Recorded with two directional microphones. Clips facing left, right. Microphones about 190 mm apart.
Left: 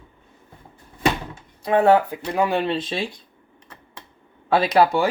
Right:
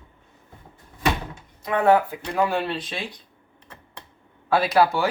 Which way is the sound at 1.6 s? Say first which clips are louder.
Left 3 dB; 30° left (ahead or behind).